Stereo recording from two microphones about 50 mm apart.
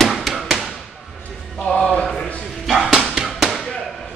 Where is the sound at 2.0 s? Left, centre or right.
Centre.